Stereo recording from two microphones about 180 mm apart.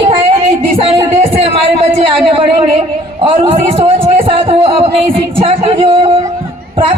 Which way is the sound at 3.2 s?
30° right (ahead or behind).